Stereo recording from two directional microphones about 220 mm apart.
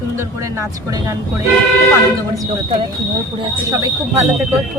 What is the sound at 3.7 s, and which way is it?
Speech, 15° right (ahead or behind).